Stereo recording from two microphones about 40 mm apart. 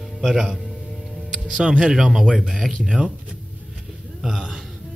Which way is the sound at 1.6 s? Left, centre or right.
Right.